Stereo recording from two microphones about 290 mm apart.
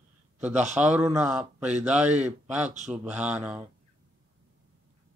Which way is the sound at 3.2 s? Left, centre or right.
Centre.